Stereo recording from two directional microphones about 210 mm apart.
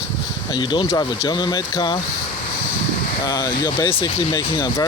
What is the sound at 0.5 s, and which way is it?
Speech, 20° left (ahead or behind).